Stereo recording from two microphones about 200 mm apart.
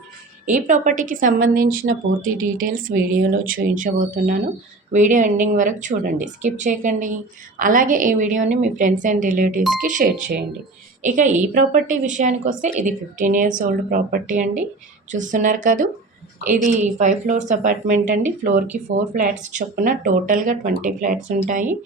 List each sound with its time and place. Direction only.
0.4 s speech: 40° right (ahead or behind)